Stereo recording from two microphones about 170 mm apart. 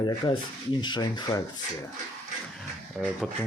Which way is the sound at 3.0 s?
5° right (ahead or behind).